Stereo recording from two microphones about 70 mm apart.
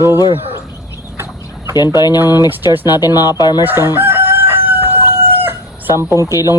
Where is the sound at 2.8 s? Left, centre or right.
Left.